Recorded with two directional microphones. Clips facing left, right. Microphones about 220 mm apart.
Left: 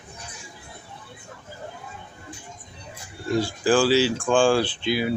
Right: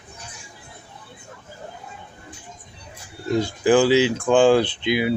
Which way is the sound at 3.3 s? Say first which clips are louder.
Right 3 dB; 20° right (ahead or behind).